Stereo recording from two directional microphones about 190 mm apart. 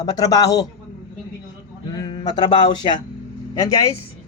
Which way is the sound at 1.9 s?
20° left (ahead or behind).